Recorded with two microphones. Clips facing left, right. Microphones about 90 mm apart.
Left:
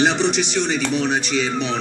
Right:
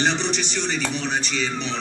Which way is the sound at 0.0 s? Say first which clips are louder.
Left 5 dB; 5° left (ahead or behind).